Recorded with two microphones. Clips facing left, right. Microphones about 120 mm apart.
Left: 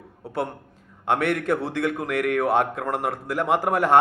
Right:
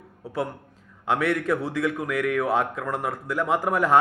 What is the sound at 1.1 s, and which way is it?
A man's voice, 60° left (ahead or behind).